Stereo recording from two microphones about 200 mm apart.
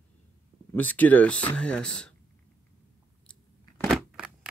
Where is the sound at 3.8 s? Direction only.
Centre (ahead or behind).